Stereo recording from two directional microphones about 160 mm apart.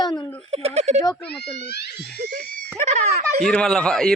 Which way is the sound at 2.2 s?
90° right.